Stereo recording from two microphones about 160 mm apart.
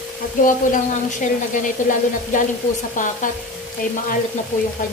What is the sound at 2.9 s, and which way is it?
Speech, 55° left (ahead or behind).